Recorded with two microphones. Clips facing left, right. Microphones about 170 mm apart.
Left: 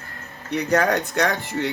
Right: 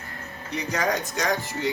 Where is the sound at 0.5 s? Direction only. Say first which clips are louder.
Left 6 dB; 60° left (ahead or behind).